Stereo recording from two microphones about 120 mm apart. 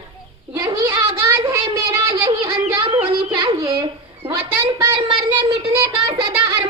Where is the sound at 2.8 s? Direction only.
45° right (ahead or behind).